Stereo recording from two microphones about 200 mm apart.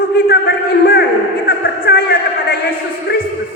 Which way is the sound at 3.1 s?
55° left (ahead or behind).